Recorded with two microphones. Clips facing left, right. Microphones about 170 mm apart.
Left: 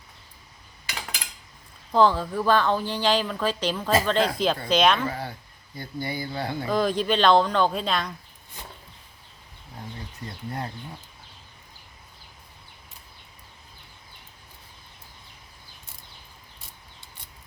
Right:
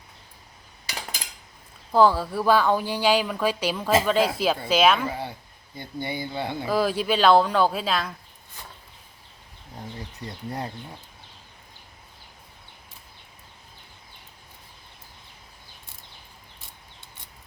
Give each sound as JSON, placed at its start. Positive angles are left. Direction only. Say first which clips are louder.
{"t": 1.9, "sound": "speech", "louder": "right 1 dB", "side_deg": -10}
{"t": 5.7, "sound": "speech", "louder": "even", "side_deg": -20}
{"t": 6.7, "sound": "speech", "louder": "even", "side_deg": -5}
{"t": 10.2, "sound": "speech", "louder": "right 1 dB", "side_deg": -30}